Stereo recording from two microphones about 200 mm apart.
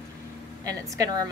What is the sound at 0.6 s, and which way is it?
Speech, 20° right (ahead or behind).